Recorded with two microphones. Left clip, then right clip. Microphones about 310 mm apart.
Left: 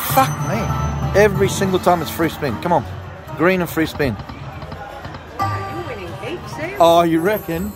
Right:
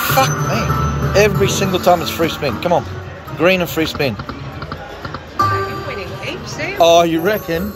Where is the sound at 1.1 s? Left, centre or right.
Left.